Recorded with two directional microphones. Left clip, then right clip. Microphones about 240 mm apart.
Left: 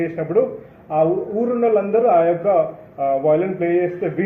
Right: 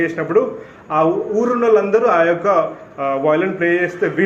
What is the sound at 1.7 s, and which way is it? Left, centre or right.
A man's voice, right.